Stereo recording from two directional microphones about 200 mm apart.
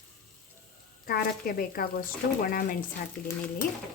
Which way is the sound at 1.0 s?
50° left (ahead or behind).